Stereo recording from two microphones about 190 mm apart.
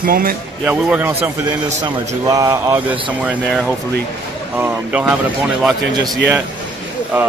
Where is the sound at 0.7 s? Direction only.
5° right (ahead or behind).